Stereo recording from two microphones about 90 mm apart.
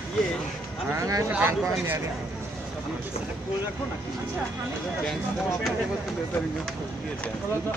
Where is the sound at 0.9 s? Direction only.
40° right (ahead or behind).